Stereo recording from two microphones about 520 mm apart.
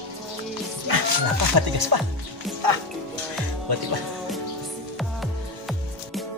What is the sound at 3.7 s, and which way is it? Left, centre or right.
Music, right.